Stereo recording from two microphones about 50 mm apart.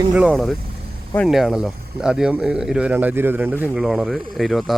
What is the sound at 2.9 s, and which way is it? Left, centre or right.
Speech, right.